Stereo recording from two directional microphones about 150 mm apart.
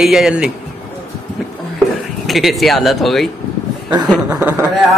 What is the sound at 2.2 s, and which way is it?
Speech, centre (ahead or behind).